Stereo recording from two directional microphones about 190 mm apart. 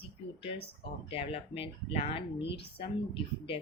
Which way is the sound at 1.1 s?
30° left (ahead or behind).